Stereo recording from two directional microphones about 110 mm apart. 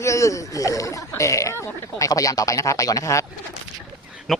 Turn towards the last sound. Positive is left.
turn(degrees=0)  # may be behind; listen again after turning